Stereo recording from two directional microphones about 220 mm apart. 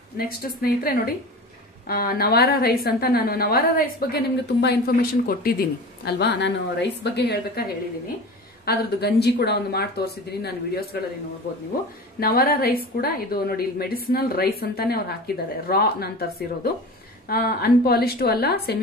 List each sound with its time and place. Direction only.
0.2 s a woman's voice: 40° left (ahead or behind)
12.2 s a woman's voice: 45° left (ahead or behind)